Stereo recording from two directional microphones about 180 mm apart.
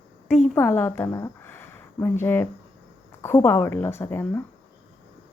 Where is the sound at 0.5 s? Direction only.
15° left (ahead or behind).